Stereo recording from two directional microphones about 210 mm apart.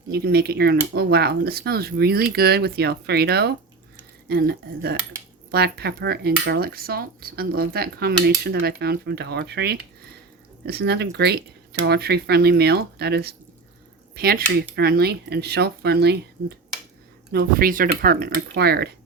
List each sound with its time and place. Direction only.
0.1 s speech: 50° right (ahead or behind)
17.3 s speech: 45° right (ahead or behind)